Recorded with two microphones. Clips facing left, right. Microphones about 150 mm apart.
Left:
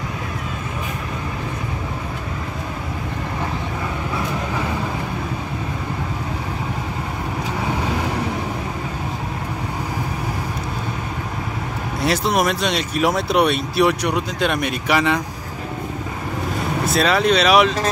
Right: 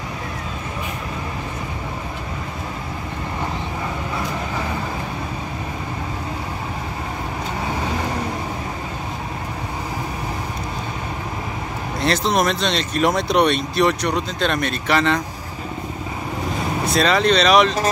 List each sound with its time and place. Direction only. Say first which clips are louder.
12.0 s speech: even; 10° left (ahead or behind)
16.8 s speech: even; 5° left (ahead or behind)